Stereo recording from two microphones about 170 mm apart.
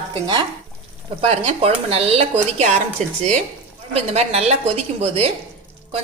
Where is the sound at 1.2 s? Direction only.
35° right (ahead or behind).